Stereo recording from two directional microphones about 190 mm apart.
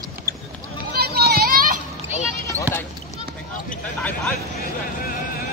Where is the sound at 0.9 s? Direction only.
55° right (ahead or behind).